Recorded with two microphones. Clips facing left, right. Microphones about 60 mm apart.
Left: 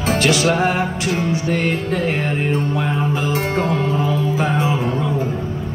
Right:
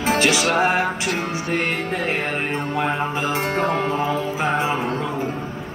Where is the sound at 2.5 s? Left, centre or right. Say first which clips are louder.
Left 2 dB; right.